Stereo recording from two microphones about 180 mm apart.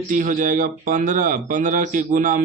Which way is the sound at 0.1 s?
45° right (ahead or behind).